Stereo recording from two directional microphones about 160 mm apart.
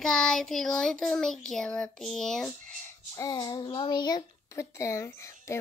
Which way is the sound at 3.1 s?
20° left (ahead or behind).